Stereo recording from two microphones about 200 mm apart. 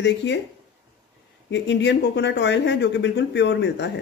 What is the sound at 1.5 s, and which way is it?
Speech, 60° left (ahead or behind).